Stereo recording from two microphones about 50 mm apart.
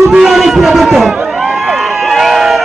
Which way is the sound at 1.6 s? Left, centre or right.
Centre.